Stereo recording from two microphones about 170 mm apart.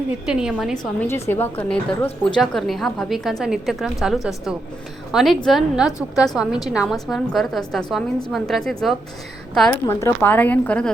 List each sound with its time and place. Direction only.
0.3 s a woman's voice: 5° right (ahead or behind)
0.9 s a woman's voice: 15° left (ahead or behind)